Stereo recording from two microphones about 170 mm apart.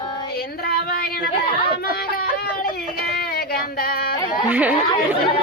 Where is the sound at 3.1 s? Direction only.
65° left (ahead or behind).